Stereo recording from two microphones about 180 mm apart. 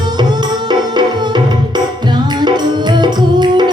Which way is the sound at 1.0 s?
25° right (ahead or behind).